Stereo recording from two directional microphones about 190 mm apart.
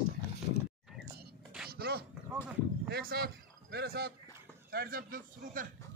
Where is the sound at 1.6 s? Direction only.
55° right (ahead or behind).